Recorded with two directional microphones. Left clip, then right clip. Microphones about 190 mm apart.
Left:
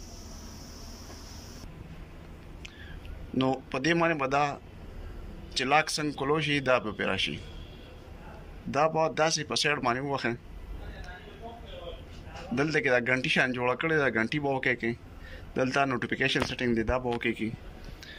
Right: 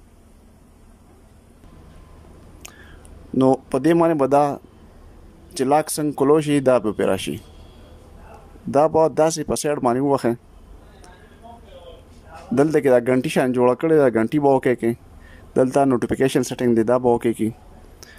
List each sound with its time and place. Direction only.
3.3 s speech: 40° right (ahead or behind)
8.6 s speech: 45° right (ahead or behind)
12.5 s speech: 40° right (ahead or behind)